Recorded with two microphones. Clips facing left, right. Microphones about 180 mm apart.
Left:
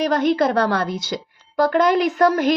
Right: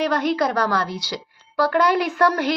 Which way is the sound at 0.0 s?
20° left (ahead or behind).